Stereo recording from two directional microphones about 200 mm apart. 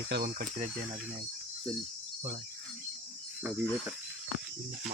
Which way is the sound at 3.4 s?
5° right (ahead or behind).